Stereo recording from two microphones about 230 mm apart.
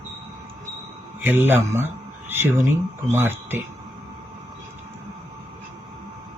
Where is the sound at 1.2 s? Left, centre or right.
Centre.